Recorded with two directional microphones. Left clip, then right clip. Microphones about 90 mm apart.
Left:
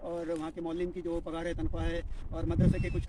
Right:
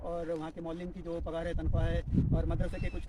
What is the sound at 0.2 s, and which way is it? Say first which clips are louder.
A man's voice: left 1 dB; 25° right (ahead or behind).